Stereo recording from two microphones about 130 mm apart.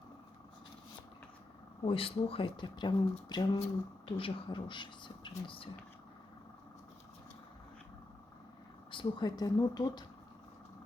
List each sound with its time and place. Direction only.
1.8 s speech: 45° left (ahead or behind)
8.9 s speech: 35° left (ahead or behind)